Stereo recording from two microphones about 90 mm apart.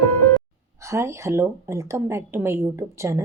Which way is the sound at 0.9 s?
30° right (ahead or behind).